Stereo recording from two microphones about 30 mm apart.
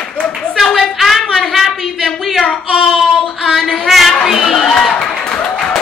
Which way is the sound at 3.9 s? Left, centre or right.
Centre.